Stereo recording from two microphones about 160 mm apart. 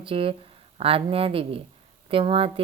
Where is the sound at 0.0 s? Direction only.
35° right (ahead or behind).